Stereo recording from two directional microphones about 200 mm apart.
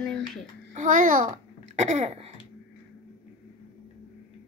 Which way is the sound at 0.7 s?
40° right (ahead or behind).